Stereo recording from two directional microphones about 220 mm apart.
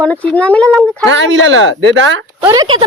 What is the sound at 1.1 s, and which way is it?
Speech, 60° right (ahead or behind).